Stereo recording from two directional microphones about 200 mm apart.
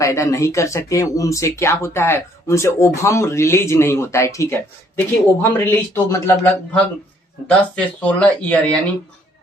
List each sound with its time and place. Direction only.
0.0 s speech: 15° left (ahead or behind)